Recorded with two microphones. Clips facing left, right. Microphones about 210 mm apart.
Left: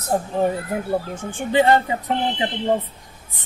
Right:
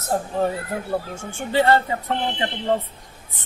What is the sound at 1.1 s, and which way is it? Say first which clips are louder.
Speech: left 2 dB; 15° left (ahead or behind).